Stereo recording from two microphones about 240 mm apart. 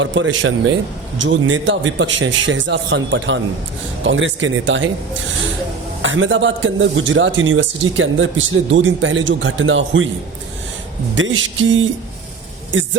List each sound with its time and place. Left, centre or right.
0.0 s a man's voice: right
6.0 s a man's voice: right
11.1 s a man's voice: right